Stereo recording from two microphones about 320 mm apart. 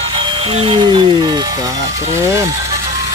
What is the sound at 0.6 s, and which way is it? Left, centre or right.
Speech, centre.